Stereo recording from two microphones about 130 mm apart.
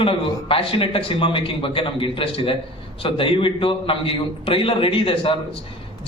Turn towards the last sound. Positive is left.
turn(degrees=45)  # may be behind; listen again after turning